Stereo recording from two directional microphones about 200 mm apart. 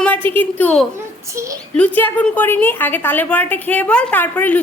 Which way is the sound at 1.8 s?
5° left (ahead or behind).